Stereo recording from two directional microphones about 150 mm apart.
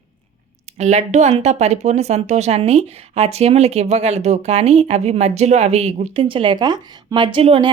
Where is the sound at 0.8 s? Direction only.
50° right (ahead or behind).